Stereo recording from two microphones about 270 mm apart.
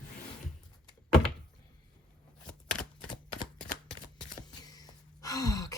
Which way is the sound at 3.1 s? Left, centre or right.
Left.